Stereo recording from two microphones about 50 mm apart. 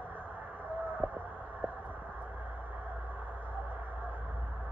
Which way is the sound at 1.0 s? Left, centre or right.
Right.